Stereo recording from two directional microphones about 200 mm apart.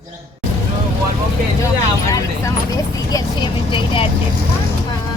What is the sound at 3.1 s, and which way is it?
Vehicle, 20° left (ahead or behind).